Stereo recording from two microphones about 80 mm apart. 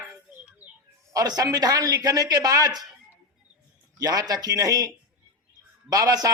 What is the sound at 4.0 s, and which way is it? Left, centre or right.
Speech, right.